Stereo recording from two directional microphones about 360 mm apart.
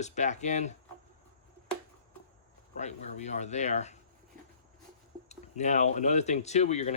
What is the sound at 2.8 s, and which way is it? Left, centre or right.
Mechanisms, centre.